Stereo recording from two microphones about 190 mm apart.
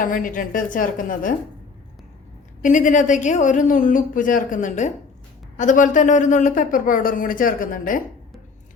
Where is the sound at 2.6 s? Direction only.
40° left (ahead or behind).